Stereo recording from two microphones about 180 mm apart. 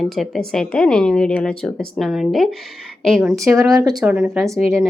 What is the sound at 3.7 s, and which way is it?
Speech, 20° right (ahead or behind).